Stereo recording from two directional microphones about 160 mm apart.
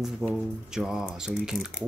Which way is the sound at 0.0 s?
Centre (ahead or behind).